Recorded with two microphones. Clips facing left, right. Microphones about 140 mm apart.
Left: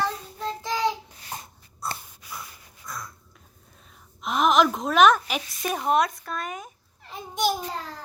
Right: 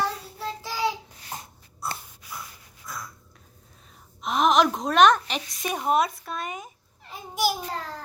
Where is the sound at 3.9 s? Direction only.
Centre (ahead or behind).